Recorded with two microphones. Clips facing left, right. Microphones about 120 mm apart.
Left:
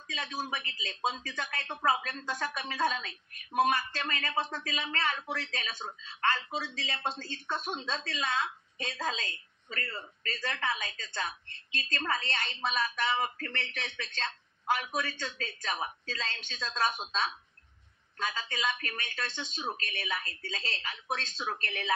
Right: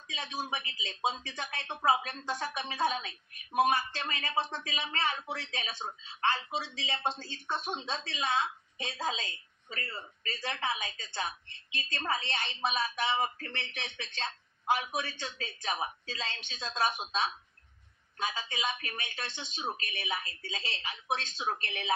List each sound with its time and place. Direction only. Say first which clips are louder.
0.1 s a man's voice: left 1 dB; 20° right (ahead or behind)